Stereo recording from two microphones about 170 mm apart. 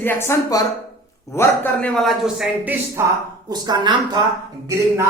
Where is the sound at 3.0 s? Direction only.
15° right (ahead or behind).